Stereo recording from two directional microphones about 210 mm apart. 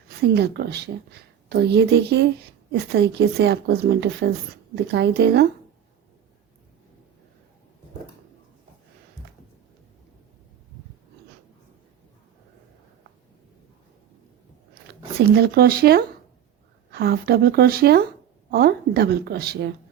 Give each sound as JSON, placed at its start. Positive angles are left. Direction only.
{"t": 0.3, "sound": "speech", "side_deg": -50}
{"t": 15.4, "sound": "speech", "side_deg": -45}